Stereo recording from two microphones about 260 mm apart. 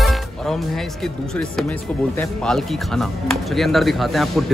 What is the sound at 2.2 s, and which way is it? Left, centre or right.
Speech, centre.